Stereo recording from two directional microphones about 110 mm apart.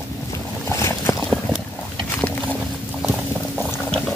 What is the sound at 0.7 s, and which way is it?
Boat, 25° left (ahead or behind).